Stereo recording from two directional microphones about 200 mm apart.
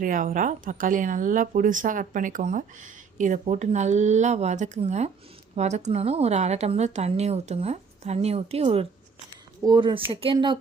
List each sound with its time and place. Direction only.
0.0 s speech: 45° right (ahead or behind); by 10.6 s 25° right (ahead or behind)